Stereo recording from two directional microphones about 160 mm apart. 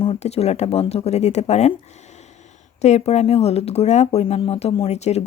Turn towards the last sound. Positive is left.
turn(degrees=45)  # may be behind; listen again after turning